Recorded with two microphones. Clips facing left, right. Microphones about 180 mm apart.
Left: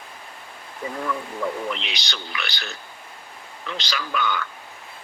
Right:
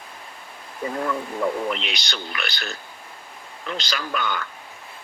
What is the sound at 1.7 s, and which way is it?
Speech, 50° right (ahead or behind).